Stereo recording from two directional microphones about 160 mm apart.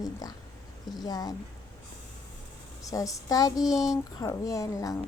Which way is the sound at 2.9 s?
20° left (ahead or behind).